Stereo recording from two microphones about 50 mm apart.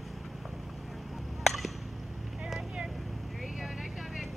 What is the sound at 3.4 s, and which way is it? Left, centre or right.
Vehicle, centre.